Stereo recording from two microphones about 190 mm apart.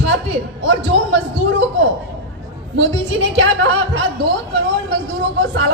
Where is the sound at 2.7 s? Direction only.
75° right (ahead or behind).